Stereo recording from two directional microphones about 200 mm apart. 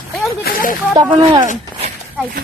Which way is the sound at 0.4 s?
45° left (ahead or behind).